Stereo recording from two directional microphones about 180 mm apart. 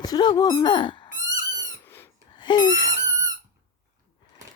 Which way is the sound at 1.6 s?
15° left (ahead or behind).